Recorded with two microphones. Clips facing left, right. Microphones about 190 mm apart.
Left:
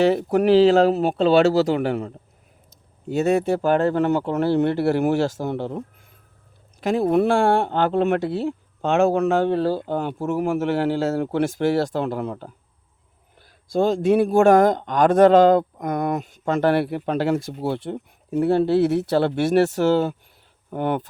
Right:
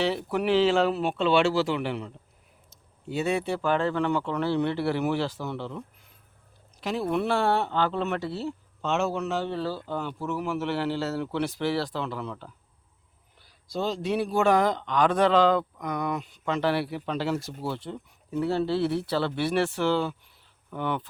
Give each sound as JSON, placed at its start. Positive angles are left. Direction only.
{"t": 0.0, "sound": "speech", "side_deg": 50}